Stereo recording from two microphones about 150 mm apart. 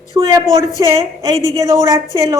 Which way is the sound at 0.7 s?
25° right (ahead or behind).